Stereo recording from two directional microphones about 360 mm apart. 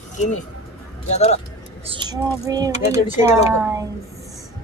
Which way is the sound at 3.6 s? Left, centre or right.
Centre.